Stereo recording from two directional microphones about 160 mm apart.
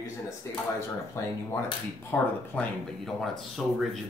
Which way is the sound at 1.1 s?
15° left (ahead or behind).